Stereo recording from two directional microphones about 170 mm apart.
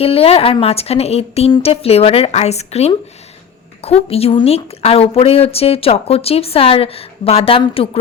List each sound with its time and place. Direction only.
0.0 s a woman's voice: 35° left (ahead or behind)